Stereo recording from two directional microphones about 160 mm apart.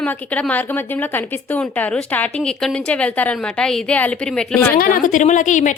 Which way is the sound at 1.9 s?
5° left (ahead or behind).